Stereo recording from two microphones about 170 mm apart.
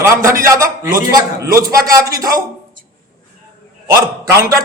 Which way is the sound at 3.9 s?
20° right (ahead or behind).